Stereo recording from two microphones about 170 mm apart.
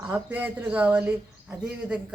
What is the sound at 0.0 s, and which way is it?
Speech, 10° right (ahead or behind).